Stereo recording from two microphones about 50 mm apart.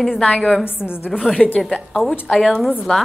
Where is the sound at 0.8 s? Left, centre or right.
Left.